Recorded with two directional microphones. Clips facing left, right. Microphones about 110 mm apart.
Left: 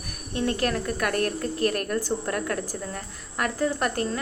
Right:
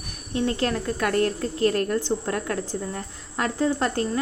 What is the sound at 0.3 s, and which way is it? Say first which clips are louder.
A woman's voice: right 1 dB; 25° right (ahead or behind).